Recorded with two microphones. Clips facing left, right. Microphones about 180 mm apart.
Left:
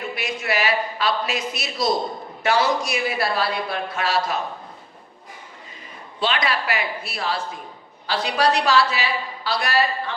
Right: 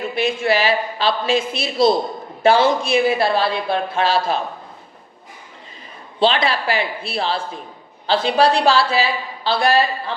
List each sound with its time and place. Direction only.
0.2 s a man's voice: 30° right (ahead or behind)
6.1 s speech: 30° right (ahead or behind)